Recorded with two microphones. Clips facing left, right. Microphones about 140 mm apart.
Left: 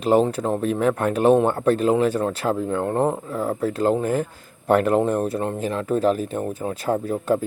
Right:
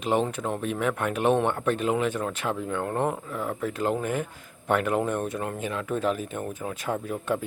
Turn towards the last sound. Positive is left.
turn(degrees=35)  # may be behind; listen again after turning